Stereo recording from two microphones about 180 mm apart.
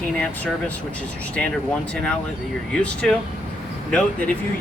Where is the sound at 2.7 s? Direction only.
5° left (ahead or behind).